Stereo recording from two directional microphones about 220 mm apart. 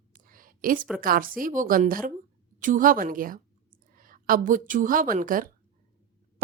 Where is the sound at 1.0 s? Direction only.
40° right (ahead or behind).